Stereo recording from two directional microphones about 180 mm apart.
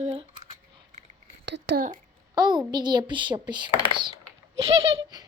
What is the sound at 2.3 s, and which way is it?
A child's voice, 25° right (ahead or behind).